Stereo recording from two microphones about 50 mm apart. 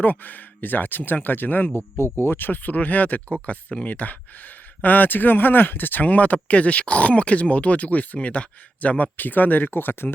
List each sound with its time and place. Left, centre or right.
0.0 s speech: left
2.0 s speech: left